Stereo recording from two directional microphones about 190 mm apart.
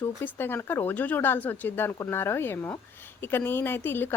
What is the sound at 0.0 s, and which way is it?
A woman's voice, 10° left (ahead or behind).